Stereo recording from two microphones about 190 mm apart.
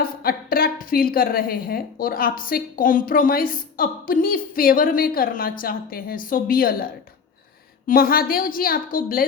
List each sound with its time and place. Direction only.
0.0 s a woman's voice: 50° left (ahead or behind)
7.9 s a woman's voice: 50° left (ahead or behind)